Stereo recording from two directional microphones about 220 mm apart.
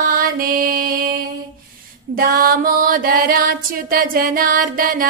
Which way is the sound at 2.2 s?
40° right (ahead or behind).